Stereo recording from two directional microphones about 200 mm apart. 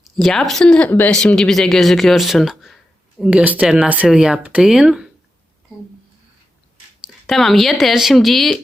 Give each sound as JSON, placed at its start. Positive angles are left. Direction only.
{"t": 0.2, "sound": "speech", "side_deg": 0}
{"t": 7.3, "sound": "speech", "side_deg": 0}